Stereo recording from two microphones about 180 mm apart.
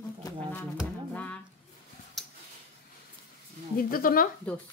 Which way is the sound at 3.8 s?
55° left (ahead or behind).